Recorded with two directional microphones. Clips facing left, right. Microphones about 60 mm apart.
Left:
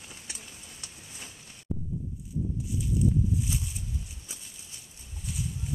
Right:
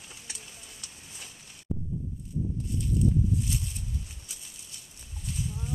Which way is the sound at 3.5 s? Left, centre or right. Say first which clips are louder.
Even; centre.